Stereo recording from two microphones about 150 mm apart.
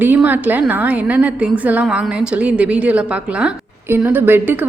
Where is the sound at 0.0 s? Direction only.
10° right (ahead or behind).